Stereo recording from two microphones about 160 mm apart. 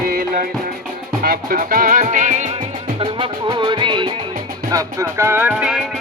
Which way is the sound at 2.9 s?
30° right (ahead or behind).